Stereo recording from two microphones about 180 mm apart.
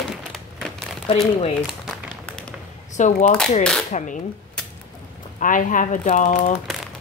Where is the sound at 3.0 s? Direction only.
45° left (ahead or behind).